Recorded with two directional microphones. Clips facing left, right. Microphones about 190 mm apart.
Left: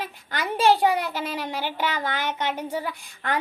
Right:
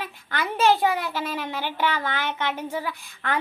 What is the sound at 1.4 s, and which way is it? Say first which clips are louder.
Speech: right 1 dB; 10° left (ahead or behind).